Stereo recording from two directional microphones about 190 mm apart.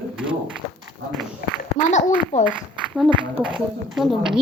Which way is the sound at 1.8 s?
40° left (ahead or behind).